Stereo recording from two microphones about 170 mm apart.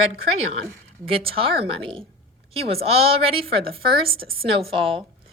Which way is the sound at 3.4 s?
60° right (ahead or behind).